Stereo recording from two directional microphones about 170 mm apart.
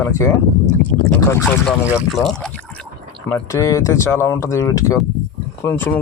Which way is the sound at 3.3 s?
15° left (ahead or behind).